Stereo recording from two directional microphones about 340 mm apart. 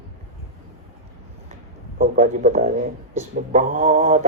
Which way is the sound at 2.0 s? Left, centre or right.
Right.